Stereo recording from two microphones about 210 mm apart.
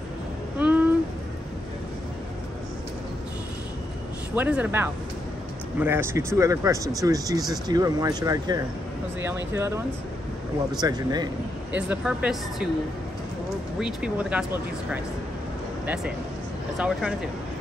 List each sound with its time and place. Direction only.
0.6 s a sound: 5° right (ahead or behind)
4.4 s speech: 5° right (ahead or behind)
11.7 s speech: 5° right (ahead or behind)
13.7 s speech: 5° right (ahead or behind)
16.7 s speech: 5° right (ahead or behind)